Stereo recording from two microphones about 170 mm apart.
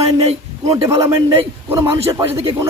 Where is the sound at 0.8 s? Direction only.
20° right (ahead or behind).